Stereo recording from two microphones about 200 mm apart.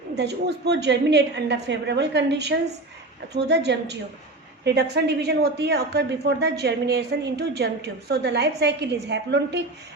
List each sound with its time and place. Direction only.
0.2 s a woman's voice: 55° right (ahead or behind)